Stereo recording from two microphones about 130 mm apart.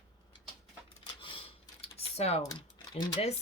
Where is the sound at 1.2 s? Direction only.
45° left (ahead or behind).